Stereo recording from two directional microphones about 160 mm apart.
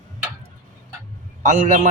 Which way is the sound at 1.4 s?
50° right (ahead or behind).